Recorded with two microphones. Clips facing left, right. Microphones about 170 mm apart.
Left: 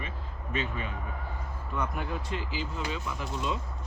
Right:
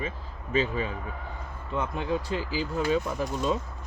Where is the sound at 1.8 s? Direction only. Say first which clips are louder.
Right 5 dB; 25° right (ahead or behind).